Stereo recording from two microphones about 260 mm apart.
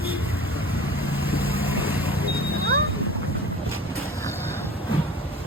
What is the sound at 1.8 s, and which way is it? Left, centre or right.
Vehicle, centre.